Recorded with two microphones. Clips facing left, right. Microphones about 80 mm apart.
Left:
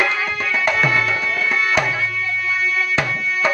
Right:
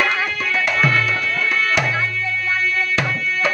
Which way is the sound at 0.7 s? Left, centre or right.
Centre.